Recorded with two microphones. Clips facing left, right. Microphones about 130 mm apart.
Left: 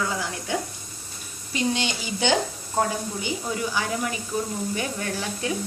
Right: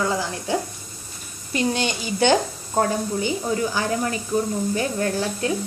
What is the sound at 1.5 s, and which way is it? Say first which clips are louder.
Speech: right 3 dB; 50° right (ahead or behind).